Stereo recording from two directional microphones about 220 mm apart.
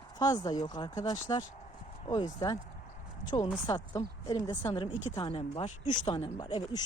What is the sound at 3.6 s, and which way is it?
Speech, 15° left (ahead or behind).